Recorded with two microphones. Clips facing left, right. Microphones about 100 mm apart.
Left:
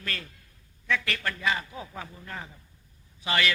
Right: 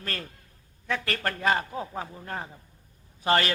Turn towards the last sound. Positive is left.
turn(degrees=-40)  # may be behind; listen again after turning